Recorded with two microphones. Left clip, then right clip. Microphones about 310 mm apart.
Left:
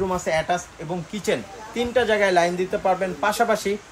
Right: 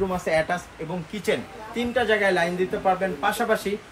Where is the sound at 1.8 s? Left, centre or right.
Left.